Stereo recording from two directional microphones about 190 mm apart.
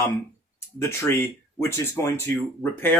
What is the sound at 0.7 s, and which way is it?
Speech, 15° left (ahead or behind).